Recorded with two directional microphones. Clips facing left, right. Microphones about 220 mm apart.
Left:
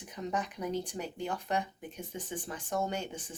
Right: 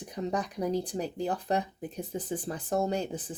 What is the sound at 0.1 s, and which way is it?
Speech, 35° right (ahead or behind).